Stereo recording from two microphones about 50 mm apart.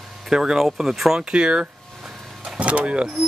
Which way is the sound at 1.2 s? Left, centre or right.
Centre.